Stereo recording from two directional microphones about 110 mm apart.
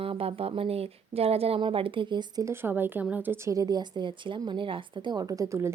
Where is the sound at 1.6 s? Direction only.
55° right (ahead or behind).